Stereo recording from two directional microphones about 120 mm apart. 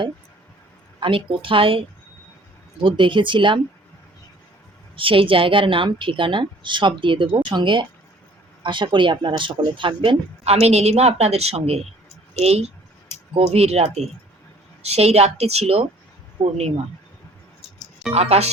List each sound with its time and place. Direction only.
0.9 s speech: 45° right (ahead or behind)
2.8 s speech: 45° right (ahead or behind)
4.9 s a woman's voice: 50° right (ahead or behind)
18.1 s a woman's voice: 60° right (ahead or behind)